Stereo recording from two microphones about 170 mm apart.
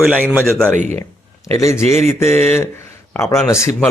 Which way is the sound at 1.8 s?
40° right (ahead or behind).